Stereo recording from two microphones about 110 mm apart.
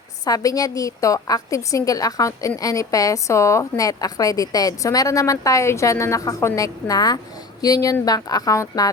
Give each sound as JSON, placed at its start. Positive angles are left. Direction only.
{"t": 0.3, "sound": "a woman's voice", "side_deg": 35}